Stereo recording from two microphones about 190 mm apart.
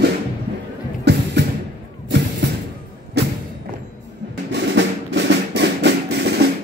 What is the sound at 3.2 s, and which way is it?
Thump, 60° right (ahead or behind).